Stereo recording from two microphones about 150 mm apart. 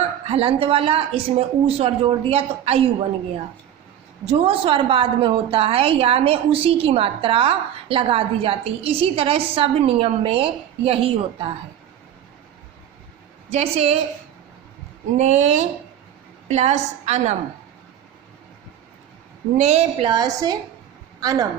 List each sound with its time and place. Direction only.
0.3 s a woman's voice: 40° right (ahead or behind)
4.3 s a woman's voice: 40° right (ahead or behind)
13.5 s a woman's voice: 45° right (ahead or behind)
15.2 s a woman's voice: 50° right (ahead or behind)
19.5 s a woman's voice: 45° right (ahead or behind)
20.1 s a woman's voice: 25° right (ahead or behind)